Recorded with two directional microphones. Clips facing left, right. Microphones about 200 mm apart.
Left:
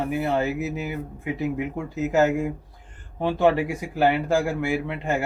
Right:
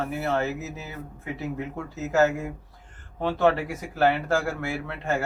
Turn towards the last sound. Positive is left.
turn(degrees=15)  # may be behind; listen again after turning